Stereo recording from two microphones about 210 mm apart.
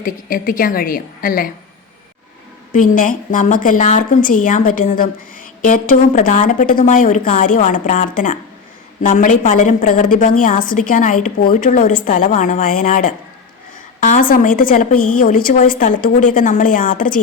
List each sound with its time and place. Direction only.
0.0 s a woman's voice: 40° left (ahead or behind)
2.9 s a woman's voice: 40° left (ahead or behind)